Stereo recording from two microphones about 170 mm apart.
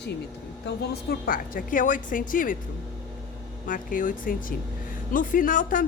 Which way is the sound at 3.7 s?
55° left (ahead or behind).